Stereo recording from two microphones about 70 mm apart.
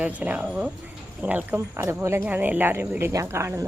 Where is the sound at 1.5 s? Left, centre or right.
Right.